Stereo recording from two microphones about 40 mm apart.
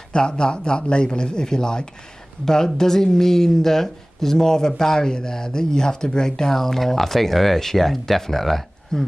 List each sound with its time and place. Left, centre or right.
0.1 s a man's voice: centre